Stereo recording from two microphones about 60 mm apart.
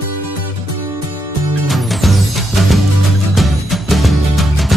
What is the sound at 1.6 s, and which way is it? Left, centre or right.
Music, centre.